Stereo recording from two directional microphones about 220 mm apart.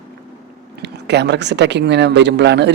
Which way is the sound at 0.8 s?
50° right (ahead or behind).